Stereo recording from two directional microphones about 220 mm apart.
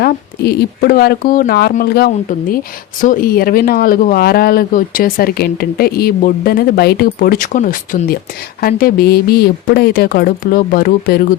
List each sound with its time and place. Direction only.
0.0 s speech: 45° left (ahead or behind)